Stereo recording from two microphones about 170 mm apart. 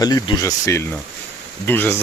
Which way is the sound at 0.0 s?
20° left (ahead or behind).